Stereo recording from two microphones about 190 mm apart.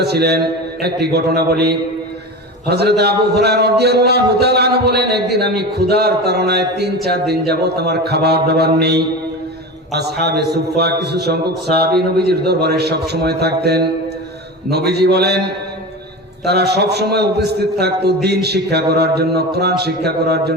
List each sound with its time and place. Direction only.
0.0 s a man's voice: 60° right (ahead or behind)
16.4 s a man's voice: 60° right (ahead or behind)